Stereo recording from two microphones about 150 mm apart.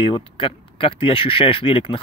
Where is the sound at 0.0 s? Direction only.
35° left (ahead or behind).